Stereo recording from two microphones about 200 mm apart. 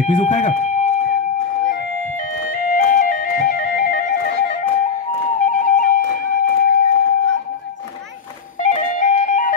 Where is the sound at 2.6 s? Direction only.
40° left (ahead or behind).